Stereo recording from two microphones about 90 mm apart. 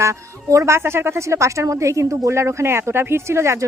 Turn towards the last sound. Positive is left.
turn(degrees=-30)  # may be behind; listen again after turning